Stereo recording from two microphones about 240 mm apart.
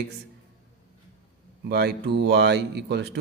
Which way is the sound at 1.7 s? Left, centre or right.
Right.